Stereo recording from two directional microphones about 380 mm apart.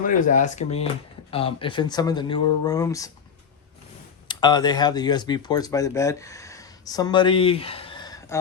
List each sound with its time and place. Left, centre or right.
0.0 s speech: centre
4.3 s speech: centre